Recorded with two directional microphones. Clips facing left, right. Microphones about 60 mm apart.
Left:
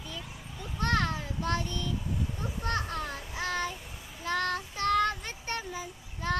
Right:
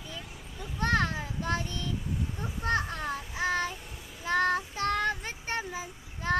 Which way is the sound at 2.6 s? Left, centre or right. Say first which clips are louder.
Right 3 dB; right.